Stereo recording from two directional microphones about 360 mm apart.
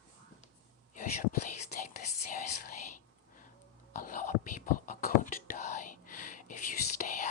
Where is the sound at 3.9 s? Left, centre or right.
Left.